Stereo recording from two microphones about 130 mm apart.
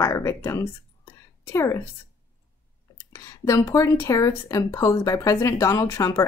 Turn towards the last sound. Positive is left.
turn(degrees=20)  # may be behind; listen again after turning